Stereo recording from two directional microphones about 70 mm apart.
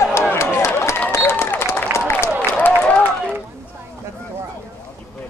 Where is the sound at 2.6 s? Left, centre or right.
Left.